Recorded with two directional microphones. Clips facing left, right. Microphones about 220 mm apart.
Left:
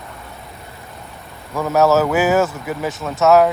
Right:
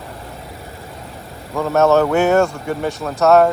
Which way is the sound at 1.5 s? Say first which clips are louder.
Right 1 dB; centre (ahead or behind).